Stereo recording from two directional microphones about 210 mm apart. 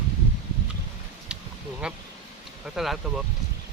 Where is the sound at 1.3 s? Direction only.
5° right (ahead or behind).